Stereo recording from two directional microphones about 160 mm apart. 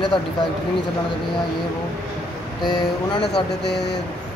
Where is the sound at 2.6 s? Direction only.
30° left (ahead or behind).